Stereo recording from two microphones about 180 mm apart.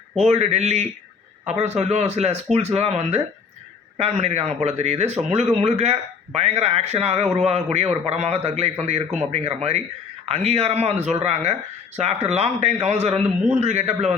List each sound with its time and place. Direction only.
0.2 s speech: 35° right (ahead or behind)